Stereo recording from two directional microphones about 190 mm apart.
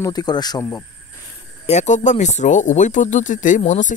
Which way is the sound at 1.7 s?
40° left (ahead or behind).